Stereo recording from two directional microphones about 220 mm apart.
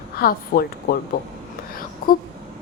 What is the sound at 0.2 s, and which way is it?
Speech, 40° left (ahead or behind).